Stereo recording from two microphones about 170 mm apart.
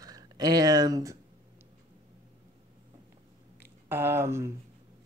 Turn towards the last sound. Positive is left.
turn(degrees=-15)  # may be behind; listen again after turning